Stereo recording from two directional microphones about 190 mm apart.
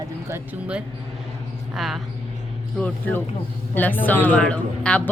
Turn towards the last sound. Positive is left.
turn(degrees=5)  # may be behind; listen again after turning